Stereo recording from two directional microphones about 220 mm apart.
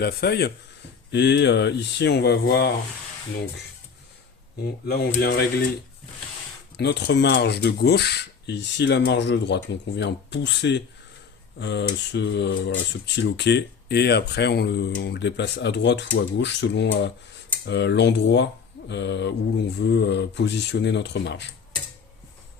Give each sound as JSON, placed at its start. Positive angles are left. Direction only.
{"t": 0.0, "sound": "speech", "side_deg": 45}
{"t": 4.9, "sound": "speech", "side_deg": 45}
{"t": 6.7, "sound": "speech", "side_deg": 50}